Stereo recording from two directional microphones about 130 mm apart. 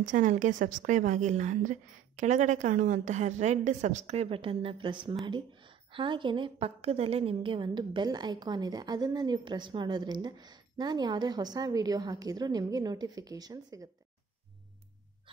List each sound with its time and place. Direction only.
0.0 s a woman's voice: 75° right (ahead or behind); by 13.8 s 30° right (ahead or behind)
15.3 s hiccup: 40° right (ahead or behind)